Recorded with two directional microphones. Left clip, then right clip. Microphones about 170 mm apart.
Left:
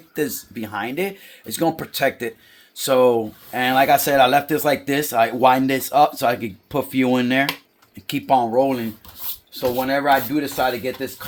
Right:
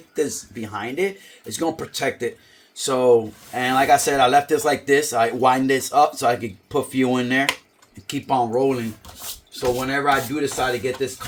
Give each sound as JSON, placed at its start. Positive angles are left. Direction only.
{"t": 0.1, "sound": "speech", "side_deg": 60}